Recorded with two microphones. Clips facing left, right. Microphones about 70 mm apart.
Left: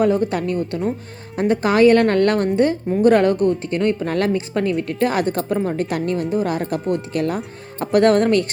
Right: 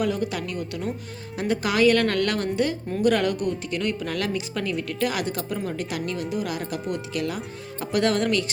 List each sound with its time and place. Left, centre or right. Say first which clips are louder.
0.0 s speech: left 8 dB; left